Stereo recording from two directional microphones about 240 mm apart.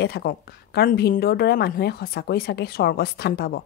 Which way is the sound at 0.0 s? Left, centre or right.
Left.